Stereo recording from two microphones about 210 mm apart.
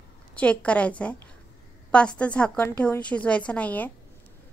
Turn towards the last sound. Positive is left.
turn(degrees=5)  # may be behind; listen again after turning